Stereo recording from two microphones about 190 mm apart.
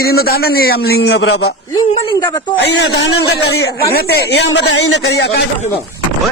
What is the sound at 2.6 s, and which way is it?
A man's voice, 65° left (ahead or behind).